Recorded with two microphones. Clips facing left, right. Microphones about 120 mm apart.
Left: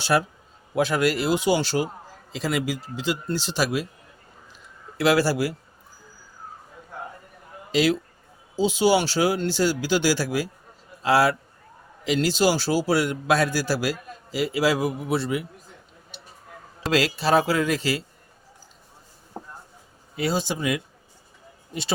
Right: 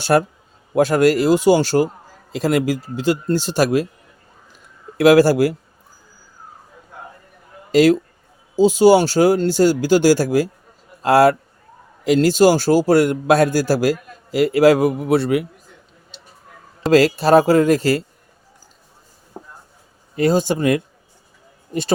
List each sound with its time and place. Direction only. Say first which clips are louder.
0.0 s a man's voice: right 6 dB; 45° right (ahead or behind)
4.9 s a man's voice: right 9 dB; 50° right (ahead or behind)
7.7 s a man's voice: right 8 dB; 45° right (ahead or behind); by 15.4 s 60° right (ahead or behind)
16.9 s a man's voice: right 8 dB; 45° right (ahead or behind)
20.1 s a man's voice: right 9 dB; 45° right (ahead or behind)